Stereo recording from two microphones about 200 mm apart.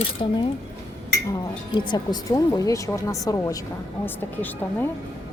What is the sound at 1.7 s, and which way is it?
A woman's voice, 20° left (ahead or behind).